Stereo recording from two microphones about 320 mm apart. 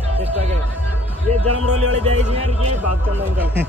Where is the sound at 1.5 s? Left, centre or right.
Right.